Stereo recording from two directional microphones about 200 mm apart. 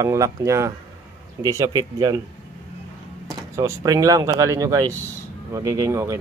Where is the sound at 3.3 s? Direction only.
15° right (ahead or behind).